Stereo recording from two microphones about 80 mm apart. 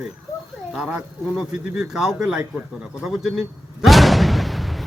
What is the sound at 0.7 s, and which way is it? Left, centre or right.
Speech, centre.